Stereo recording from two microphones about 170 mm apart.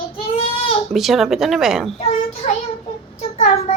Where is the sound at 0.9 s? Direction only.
Centre (ahead or behind).